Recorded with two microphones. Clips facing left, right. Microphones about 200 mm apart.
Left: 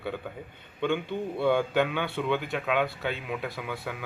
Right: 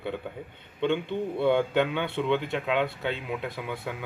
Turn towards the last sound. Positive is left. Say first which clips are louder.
# right 1 dB
turn(degrees=-20)  # may be behind; listen again after turning